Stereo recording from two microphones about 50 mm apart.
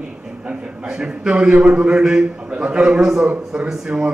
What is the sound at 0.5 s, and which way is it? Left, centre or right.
A man's voice, centre.